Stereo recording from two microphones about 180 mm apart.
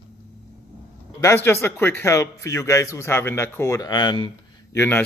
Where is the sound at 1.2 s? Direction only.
15° left (ahead or behind).